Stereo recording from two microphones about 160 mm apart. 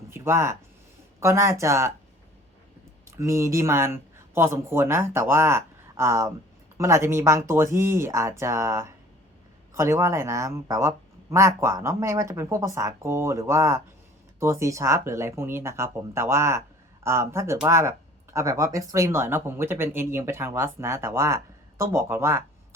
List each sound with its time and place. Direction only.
0.1 s a sound: 15° right (ahead or behind)
1.2 s speech: 15° right (ahead or behind)
3.2 s speech: 20° right (ahead or behind)